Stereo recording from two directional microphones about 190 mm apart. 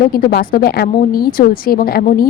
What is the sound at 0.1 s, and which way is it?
Speech, 50° left (ahead or behind).